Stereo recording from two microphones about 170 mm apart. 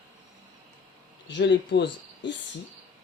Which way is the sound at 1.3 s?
90° left.